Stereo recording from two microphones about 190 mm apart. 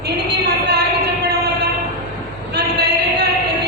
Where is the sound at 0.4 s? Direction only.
60° right (ahead or behind).